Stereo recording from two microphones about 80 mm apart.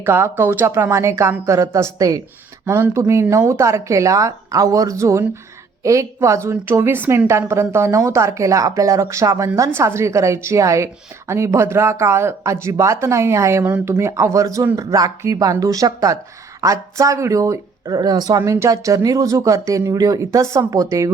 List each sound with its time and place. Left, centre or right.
0.0 s speech: right
18.3 s speech: right